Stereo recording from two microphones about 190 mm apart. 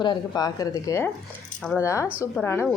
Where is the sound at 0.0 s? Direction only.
20° left (ahead or behind).